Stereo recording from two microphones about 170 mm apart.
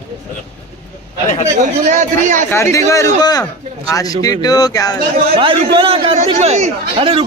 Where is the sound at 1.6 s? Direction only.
45° right (ahead or behind).